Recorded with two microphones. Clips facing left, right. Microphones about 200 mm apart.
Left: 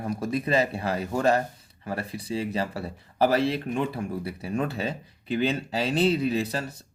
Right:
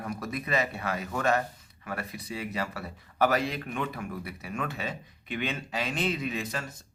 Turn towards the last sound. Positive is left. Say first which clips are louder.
# left 7 dB
turn(degrees=35)  # may be behind; listen again after turning